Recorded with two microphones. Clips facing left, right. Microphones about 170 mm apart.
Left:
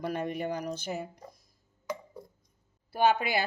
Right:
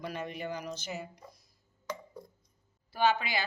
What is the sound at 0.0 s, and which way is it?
Speech, 50° left (ahead or behind).